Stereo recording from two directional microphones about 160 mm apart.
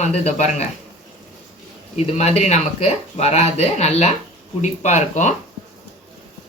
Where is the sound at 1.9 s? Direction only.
40° left (ahead or behind).